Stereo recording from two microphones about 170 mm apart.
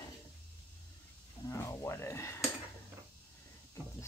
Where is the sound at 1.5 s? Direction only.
15° left (ahead or behind).